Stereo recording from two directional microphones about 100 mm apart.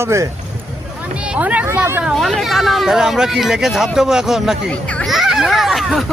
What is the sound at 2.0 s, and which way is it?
Speech, centre (ahead or behind).